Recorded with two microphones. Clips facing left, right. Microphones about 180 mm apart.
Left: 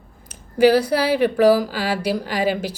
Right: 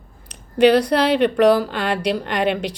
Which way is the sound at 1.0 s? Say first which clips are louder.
Right 1 dB; 70° right (ahead or behind).